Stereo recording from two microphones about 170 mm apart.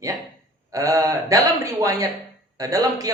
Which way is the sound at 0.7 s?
20° right (ahead or behind).